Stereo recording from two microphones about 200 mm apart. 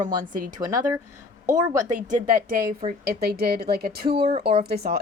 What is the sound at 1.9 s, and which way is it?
Speech, 45° right (ahead or behind).